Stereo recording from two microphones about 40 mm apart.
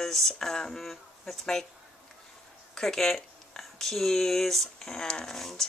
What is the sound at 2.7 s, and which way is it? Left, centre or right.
Speech, centre.